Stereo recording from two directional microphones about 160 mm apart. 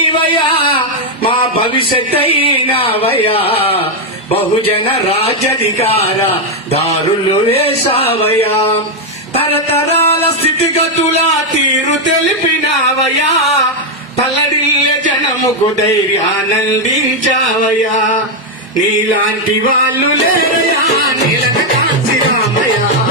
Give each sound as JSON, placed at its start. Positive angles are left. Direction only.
{"t": 0.3, "sound": "male singing", "side_deg": 35}
{"t": 2.7, "sound": "a sound", "side_deg": 35}
{"t": 4.9, "sound": "a man's voice", "side_deg": 40}
{"t": 9.9, "sound": "music", "side_deg": 40}